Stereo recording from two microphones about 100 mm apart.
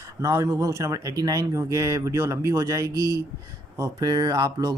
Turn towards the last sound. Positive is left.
turn(degrees=-35)  # may be behind; listen again after turning